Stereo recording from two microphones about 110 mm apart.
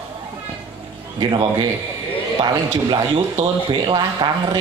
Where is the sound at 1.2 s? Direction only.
45° right (ahead or behind).